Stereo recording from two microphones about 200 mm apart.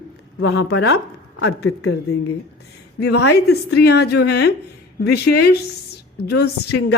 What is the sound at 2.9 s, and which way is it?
A woman's voice, 55° left (ahead or behind).